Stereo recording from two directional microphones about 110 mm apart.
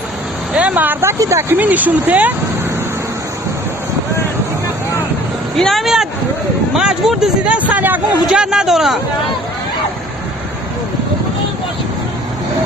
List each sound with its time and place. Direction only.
0.5 s speech: 15° right (ahead or behind)
1.2 s speech: 25° right (ahead or behind)
1.5 s speech: 15° right (ahead or behind)
5.5 s speech: centre (ahead or behind)